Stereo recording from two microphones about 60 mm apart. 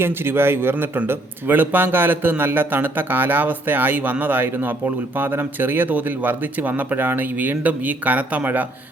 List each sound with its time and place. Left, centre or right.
0.0 s speech: right